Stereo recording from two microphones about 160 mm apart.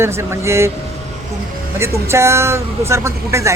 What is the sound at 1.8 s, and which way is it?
Speech, 15° right (ahead or behind).